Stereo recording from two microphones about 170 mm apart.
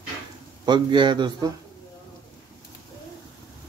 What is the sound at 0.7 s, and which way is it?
Speech, 25° right (ahead or behind).